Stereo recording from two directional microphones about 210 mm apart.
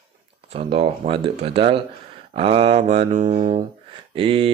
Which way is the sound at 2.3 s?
25° right (ahead or behind).